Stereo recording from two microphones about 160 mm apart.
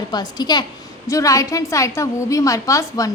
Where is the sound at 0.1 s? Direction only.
25° left (ahead or behind).